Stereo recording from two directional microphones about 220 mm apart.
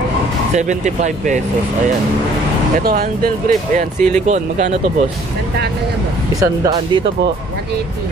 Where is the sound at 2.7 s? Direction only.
40° right (ahead or behind).